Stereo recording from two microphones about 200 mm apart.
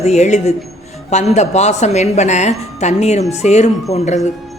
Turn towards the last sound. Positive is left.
turn(degrees=35)  # may be behind; listen again after turning